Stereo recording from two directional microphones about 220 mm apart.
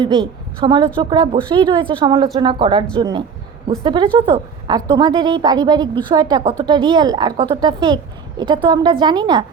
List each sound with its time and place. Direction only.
0.0 s a woman's voice: 20° right (ahead or behind)